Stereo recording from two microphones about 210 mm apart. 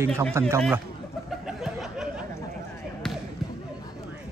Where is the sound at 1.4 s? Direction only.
Centre (ahead or behind).